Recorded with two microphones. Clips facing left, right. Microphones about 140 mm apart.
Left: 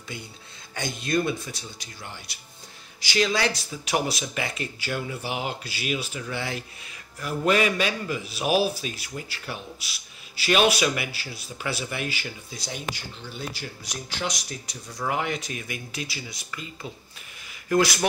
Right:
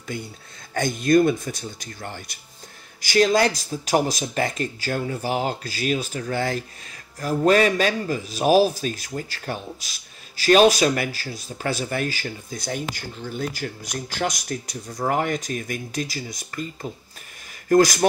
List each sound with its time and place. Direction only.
0.1 s a man's voice: 45° right (ahead or behind)